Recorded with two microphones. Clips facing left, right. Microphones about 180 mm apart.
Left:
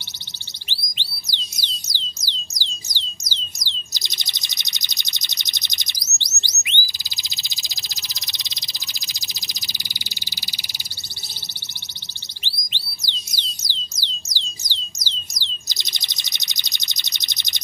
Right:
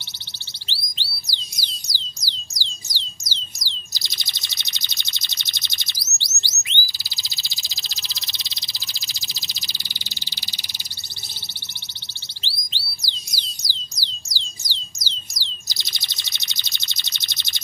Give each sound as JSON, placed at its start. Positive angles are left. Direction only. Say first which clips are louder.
{"t": 0.7, "sound": "music", "louder": "even", "side_deg": 20}
{"t": 2.2, "sound": "a sound", "louder": "left 1 dB", "side_deg": 20}
{"t": 12.4, "sound": "music", "louder": "even", "side_deg": 15}